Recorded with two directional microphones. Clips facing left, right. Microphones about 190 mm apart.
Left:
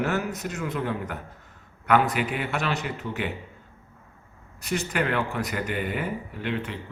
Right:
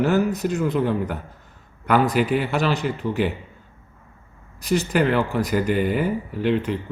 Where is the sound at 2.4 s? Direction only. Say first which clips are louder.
Right 6 dB; 35° right (ahead or behind).